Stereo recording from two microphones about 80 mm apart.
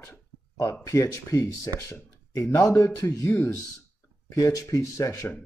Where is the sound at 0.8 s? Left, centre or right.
Left.